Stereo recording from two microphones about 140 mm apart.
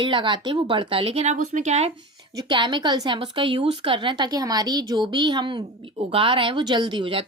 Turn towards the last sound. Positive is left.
turn(degrees=-35)  # may be behind; listen again after turning